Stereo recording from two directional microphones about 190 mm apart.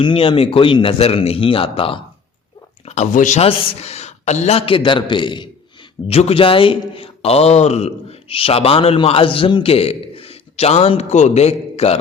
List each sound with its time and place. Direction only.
0.0 s a man's voice: 25° left (ahead or behind)